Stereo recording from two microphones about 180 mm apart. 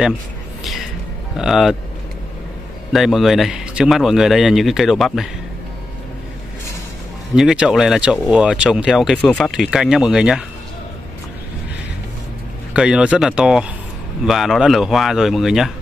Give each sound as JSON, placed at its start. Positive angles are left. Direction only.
{"t": 1.3, "sound": "speech", "side_deg": 0}
{"t": 2.9, "sound": "speech", "side_deg": 0}
{"t": 7.3, "sound": "speech", "side_deg": -5}
{"t": 12.7, "sound": "speech", "side_deg": -5}